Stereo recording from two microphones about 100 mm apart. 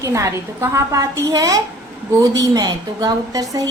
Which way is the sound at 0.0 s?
30° right (ahead or behind).